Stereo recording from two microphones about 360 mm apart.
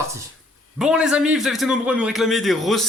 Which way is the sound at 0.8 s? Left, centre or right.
Centre.